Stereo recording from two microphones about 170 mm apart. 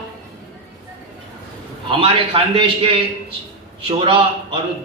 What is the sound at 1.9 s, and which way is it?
A man's voice, 30° right (ahead or behind).